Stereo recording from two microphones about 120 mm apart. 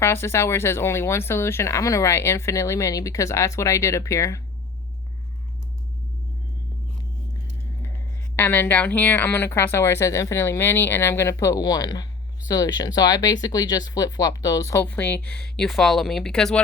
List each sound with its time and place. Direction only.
0.0 s speech: 20° left (ahead or behind)
8.4 s speech: 15° left (ahead or behind)
14.8 s speech: 15° left (ahead or behind)